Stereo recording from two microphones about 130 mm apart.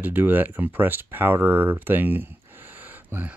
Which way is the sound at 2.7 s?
15° right (ahead or behind).